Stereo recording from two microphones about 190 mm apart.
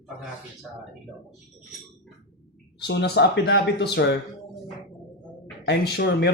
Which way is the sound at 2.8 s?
65° left (ahead or behind).